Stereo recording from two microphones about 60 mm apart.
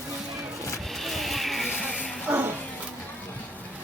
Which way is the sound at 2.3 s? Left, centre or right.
Right.